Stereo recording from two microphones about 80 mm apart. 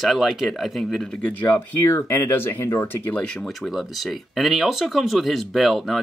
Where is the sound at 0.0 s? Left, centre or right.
Centre.